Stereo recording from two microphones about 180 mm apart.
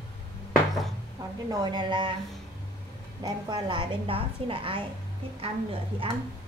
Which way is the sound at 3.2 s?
25° right (ahead or behind).